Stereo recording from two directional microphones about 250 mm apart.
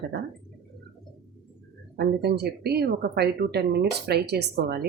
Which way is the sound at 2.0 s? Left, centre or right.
Right.